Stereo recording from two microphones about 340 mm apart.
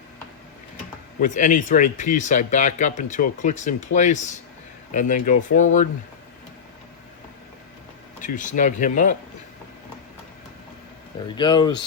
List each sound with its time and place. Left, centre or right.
1.2 s speech: left
8.2 s speech: left
11.3 s speech: centre